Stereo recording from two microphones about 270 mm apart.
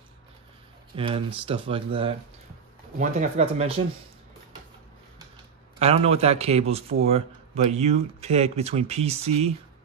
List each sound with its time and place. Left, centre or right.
0.9 s speech: centre
5.8 s speech: right